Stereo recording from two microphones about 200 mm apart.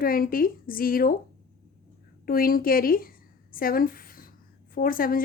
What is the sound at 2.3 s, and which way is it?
A woman's voice, 45° left (ahead or behind).